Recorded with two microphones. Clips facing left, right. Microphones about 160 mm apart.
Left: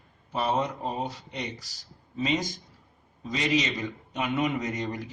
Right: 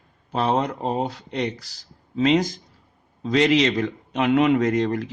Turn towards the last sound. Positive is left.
turn(degrees=-75)  # may be behind; listen again after turning